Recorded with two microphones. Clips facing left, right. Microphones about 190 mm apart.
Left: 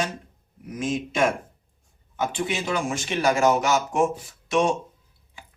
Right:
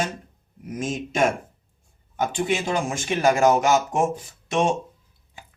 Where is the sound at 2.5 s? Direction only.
50° right (ahead or behind).